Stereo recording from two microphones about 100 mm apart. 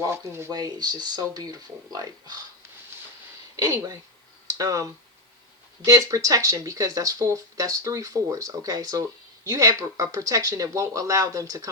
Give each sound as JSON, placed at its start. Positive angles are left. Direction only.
{"t": 0.0, "sound": "speech", "side_deg": -25}
{"t": 0.5, "sound": "speech", "side_deg": -40}
{"t": 3.5, "sound": "speech", "side_deg": -35}